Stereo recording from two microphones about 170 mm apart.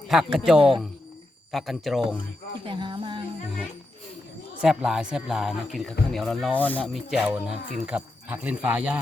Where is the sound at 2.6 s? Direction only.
30° right (ahead or behind).